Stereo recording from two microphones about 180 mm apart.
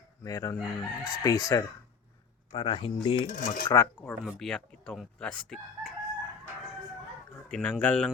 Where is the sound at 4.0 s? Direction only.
5° left (ahead or behind).